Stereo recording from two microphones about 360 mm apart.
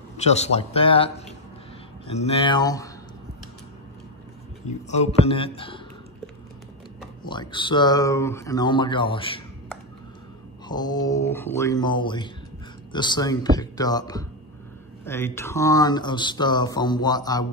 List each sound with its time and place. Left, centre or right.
0.2 s speech: centre
4.6 s speech: centre
7.2 s speech: centre
10.7 s speech: centre